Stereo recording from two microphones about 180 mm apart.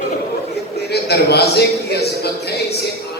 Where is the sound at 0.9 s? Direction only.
65° left (ahead or behind).